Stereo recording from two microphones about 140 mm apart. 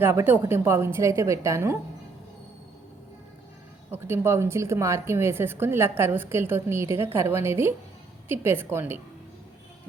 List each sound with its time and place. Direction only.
0.0 s a woman's voice: 15° right (ahead or behind)
3.9 s a woman's voice: 15° right (ahead or behind)